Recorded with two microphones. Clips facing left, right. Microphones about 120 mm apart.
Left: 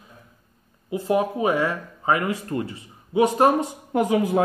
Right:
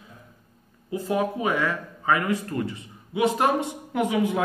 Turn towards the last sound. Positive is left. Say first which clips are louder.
# left 3 dB
turn(degrees=30)  # may be behind; listen again after turning